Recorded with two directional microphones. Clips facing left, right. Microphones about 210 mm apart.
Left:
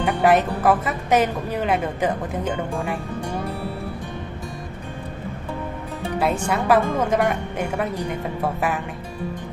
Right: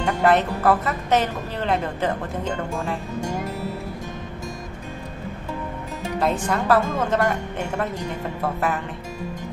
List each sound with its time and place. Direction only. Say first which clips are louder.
0.0 s speech: left 1 dB; 10° left (ahead or behind)
6.1 s speech: left 1 dB; 10° left (ahead or behind)